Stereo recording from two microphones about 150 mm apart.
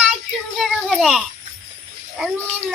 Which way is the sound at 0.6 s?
Centre (ahead or behind).